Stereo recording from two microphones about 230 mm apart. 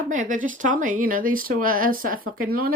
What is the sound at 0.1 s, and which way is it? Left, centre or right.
Speech, right.